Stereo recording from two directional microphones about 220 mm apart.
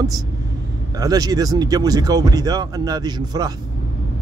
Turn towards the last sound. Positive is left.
turn(degrees=-20)  # may be behind; listen again after turning